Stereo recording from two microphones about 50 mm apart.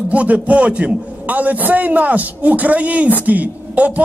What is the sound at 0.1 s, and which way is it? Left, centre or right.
A man's voice, right.